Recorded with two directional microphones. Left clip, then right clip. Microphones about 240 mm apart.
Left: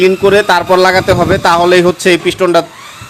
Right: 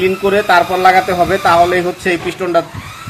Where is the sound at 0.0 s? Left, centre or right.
Left.